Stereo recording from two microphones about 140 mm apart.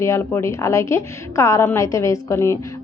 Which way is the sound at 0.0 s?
20° left (ahead or behind).